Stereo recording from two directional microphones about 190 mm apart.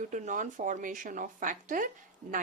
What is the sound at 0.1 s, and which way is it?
A woman's voice, 40° right (ahead or behind).